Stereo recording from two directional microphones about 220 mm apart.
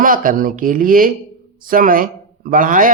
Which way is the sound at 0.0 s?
40° right (ahead or behind).